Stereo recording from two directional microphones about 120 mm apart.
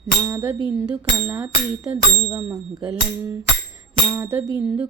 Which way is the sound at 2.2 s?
25° right (ahead or behind).